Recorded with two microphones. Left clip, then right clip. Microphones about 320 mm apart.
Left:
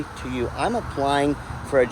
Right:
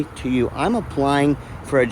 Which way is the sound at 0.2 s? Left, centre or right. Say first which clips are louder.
Right 4 dB; right.